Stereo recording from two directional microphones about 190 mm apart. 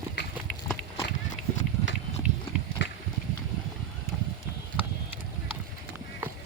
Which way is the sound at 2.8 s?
70° left (ahead or behind).